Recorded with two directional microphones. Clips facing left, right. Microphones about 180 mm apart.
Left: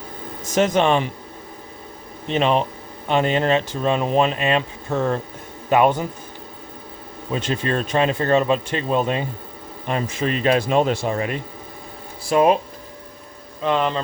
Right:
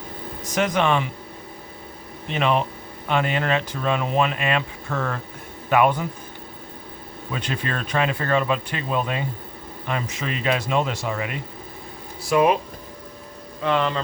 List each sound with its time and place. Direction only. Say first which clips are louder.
0.5 s speech: left 4 dB; 25° left (ahead or behind)
2.3 s speech: left 3 dB; 30° left (ahead or behind)
7.3 s speech: left 5 dB; 25° left (ahead or behind)
10.2 s speech: left 7 dB; 40° left (ahead or behind)
13.7 s speech: left 2 dB; 20° left (ahead or behind)